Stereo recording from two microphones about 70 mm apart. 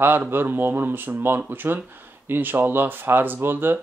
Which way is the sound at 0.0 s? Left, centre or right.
Right.